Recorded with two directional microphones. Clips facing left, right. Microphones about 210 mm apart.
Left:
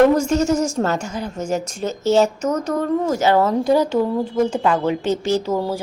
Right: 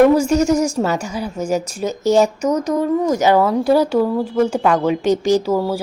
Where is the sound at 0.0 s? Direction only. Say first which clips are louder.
Right 2 dB; 10° right (ahead or behind).